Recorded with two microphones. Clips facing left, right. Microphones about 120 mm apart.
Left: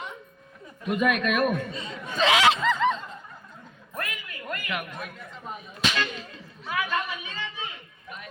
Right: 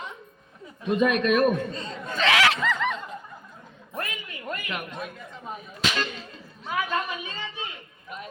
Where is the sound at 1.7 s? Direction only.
10° left (ahead or behind).